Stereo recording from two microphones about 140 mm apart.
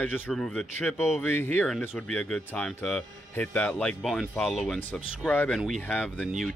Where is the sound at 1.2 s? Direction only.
15° left (ahead or behind).